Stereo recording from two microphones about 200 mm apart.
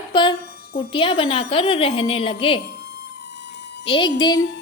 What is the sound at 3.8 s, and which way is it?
Speech, 25° left (ahead or behind).